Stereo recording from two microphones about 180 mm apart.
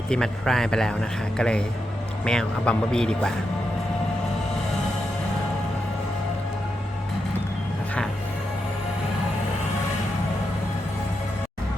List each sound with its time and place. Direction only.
0.1 s a man's voice: 5° left (ahead or behind)